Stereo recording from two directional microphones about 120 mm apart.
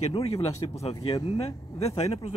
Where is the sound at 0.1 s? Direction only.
60° left (ahead or behind).